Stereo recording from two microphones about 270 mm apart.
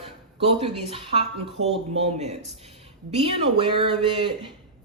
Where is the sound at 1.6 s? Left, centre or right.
Right.